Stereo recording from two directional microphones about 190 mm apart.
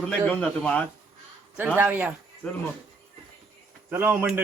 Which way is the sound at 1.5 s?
10° right (ahead or behind).